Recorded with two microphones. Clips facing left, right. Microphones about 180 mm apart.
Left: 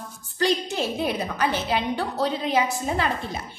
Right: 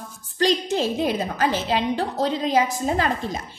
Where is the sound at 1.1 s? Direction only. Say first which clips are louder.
Right 2 dB; 35° right (ahead or behind).